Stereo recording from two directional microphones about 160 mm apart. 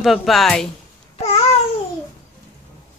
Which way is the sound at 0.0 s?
Centre (ahead or behind).